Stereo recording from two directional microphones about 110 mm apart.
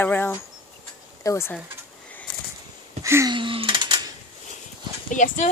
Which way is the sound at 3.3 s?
50° right (ahead or behind).